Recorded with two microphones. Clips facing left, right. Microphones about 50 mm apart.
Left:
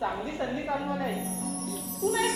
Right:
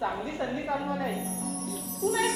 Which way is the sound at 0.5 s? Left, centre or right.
Centre.